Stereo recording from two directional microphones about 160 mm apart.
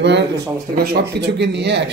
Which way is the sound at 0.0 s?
90° right.